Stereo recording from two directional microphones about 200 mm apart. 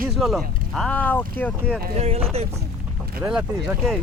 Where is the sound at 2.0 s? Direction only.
30° right (ahead or behind).